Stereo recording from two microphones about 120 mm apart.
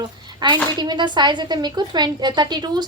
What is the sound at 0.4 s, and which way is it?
Speech, 35° right (ahead or behind).